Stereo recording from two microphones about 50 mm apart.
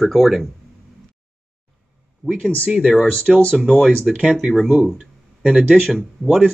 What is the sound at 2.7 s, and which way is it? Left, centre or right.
Speech, centre.